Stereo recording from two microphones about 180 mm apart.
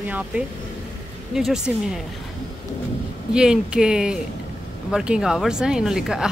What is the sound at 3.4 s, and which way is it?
Speech, 5° right (ahead or behind).